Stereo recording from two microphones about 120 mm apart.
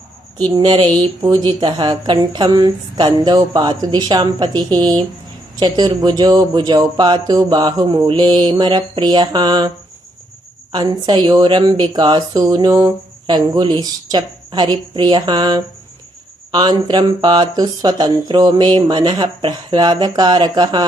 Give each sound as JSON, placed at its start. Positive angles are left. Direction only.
{"t": 0.5, "sound": "a woman's voice", "side_deg": -35}